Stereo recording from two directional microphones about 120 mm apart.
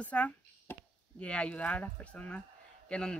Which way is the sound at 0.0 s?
10° left (ahead or behind).